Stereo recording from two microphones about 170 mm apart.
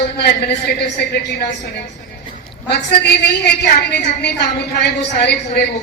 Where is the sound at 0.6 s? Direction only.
70° left (ahead or behind).